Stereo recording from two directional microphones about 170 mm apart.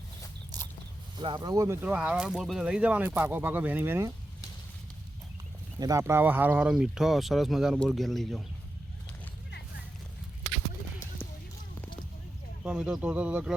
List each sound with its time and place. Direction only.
1.1 s speech: 30° right (ahead or behind); by 4.1 s 15° right (ahead or behind)
5.8 s speech: 20° right (ahead or behind); by 8.4 s centre (ahead or behind)
12.6 s speech: 5° right (ahead or behind)